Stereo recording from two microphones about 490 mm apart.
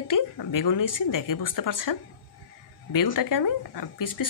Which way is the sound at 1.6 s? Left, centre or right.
Left.